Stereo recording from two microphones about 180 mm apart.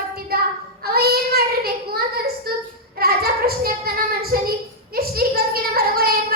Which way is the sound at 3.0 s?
60° right (ahead or behind).